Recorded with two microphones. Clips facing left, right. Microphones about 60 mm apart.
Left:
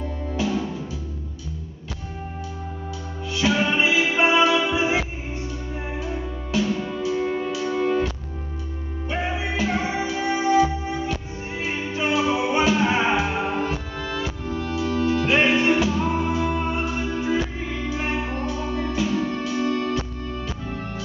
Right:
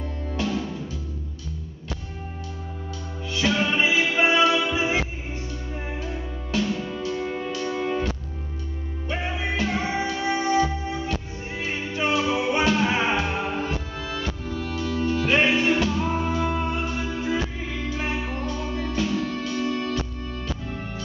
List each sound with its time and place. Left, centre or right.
0.3 s music: centre
3.3 s music: centre
9.1 s music: centre